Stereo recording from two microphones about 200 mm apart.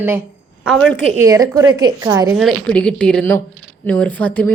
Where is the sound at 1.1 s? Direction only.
15° right (ahead or behind).